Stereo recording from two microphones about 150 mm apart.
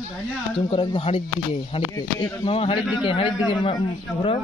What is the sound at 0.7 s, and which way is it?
Speech, 35° left (ahead or behind).